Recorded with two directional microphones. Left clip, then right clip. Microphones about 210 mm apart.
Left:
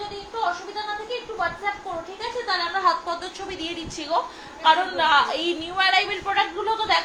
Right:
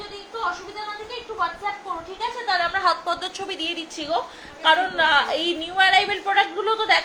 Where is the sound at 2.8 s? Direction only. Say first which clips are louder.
Even; 40° right (ahead or behind); by 7.0 s 15° right (ahead or behind).